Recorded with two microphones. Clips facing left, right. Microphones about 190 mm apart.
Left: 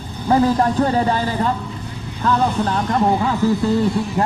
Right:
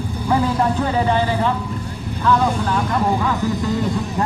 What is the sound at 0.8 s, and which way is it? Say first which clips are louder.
Speech: left 1 dB; 40° left (ahead or behind).